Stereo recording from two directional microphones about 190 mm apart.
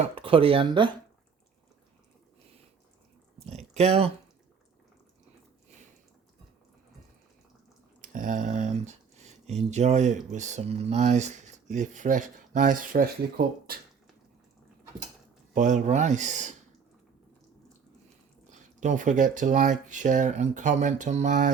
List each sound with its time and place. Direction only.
0.2 s speech: 30° right (ahead or behind)
3.4 s speech: 35° right (ahead or behind)
8.0 s speech: 45° right (ahead or behind)
15.5 s speech: 40° right (ahead or behind)
18.5 s speech: 40° right (ahead or behind)